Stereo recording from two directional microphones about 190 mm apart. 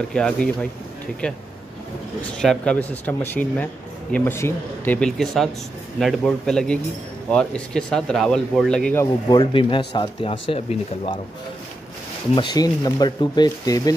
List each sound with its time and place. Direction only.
0.1 s speech: 5° left (ahead or behind)
9.0 s speech: 25° left (ahead or behind)
12.4 s speech: 20° left (ahead or behind)